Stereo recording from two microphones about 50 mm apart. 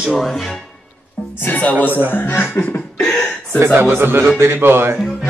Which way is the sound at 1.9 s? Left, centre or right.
Right.